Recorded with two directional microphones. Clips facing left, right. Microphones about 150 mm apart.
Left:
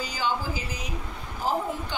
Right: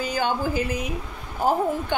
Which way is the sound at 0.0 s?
55° right (ahead or behind).